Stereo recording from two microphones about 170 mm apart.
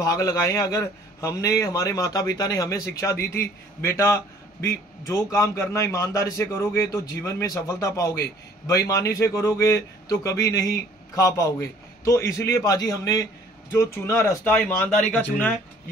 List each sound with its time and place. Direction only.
0.0 s a man's voice: 20° left (ahead or behind)